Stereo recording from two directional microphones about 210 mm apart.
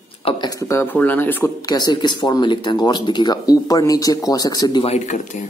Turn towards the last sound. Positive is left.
turn(degrees=35)  # may be behind; listen again after turning